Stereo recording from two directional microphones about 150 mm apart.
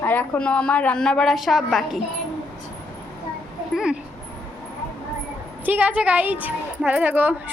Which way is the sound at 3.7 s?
5° right (ahead or behind).